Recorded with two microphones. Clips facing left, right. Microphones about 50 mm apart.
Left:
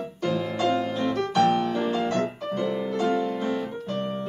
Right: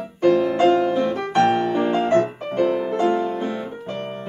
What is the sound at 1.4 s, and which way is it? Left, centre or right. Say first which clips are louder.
Music: right 4 dB; right.